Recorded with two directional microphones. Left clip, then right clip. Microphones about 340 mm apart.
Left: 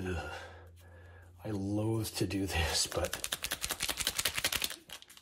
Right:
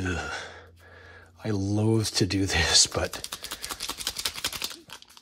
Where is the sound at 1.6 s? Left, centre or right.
Right.